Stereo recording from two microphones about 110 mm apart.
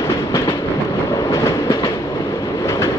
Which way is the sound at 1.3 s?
30° left (ahead or behind).